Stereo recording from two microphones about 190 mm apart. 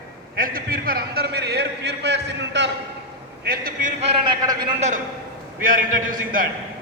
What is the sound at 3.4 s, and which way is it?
Speech, 50° right (ahead or behind).